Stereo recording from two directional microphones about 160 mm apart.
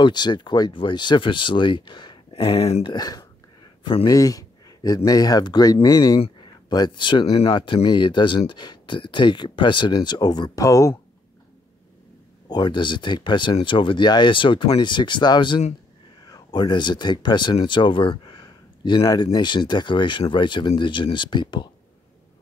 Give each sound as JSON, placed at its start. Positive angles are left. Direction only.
{"t": 0.0, "sound": "speech", "side_deg": 30}
{"t": 4.1, "sound": "speech", "side_deg": 20}
{"t": 12.4, "sound": "speech", "side_deg": 25}